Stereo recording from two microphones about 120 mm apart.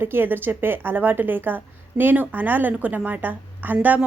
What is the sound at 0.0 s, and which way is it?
A woman's voice, 20° right (ahead or behind).